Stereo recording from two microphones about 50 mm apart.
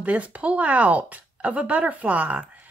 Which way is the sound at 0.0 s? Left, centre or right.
Right.